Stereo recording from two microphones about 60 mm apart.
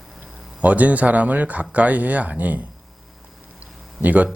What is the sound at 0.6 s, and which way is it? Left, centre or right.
Speech, right.